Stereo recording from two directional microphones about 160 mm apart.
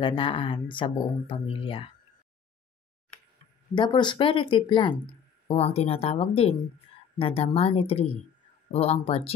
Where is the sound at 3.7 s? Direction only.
30° left (ahead or behind).